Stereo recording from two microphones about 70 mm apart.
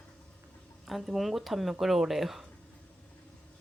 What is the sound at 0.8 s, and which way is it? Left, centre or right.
Speech, centre.